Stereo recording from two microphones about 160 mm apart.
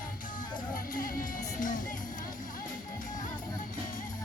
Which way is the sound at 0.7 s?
60° left (ahead or behind).